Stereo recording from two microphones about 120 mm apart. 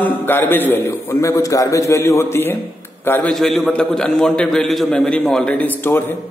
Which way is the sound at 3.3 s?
Centre (ahead or behind).